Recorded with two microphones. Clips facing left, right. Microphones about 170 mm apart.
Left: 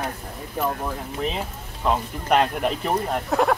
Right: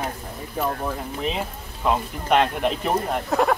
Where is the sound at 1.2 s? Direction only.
Centre (ahead or behind).